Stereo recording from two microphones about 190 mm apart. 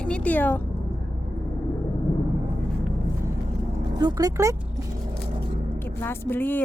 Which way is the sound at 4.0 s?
20° right (ahead or behind).